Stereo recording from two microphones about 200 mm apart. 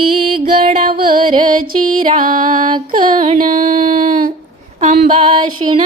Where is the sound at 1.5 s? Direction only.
45° right (ahead or behind).